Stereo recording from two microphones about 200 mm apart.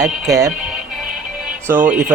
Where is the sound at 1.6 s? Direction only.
10° right (ahead or behind).